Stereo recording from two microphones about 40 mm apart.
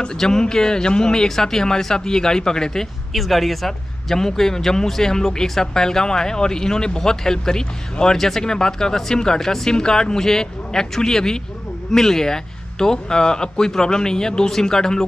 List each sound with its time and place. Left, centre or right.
0.2 s speech: centre
3.1 s speech: centre